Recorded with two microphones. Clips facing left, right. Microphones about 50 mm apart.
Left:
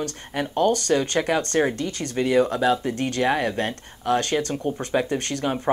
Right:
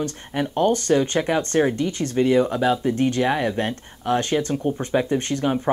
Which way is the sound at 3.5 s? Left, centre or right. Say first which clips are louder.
Right 1 dB; centre.